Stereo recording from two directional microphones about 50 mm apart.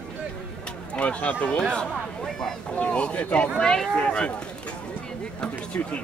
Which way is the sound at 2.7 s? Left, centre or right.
Left.